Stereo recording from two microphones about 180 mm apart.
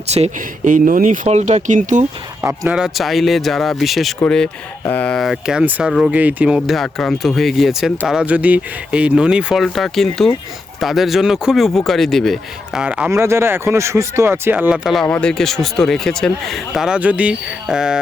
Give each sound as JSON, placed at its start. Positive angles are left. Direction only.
{"t": 0.1, "sound": "speech", "side_deg": -40}
{"t": 2.4, "sound": "speech", "side_deg": -10}
{"t": 15.0, "sound": "speech", "side_deg": 5}